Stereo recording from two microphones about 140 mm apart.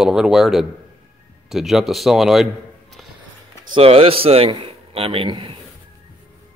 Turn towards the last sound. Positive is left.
turn(degrees=-35)  # may be behind; listen again after turning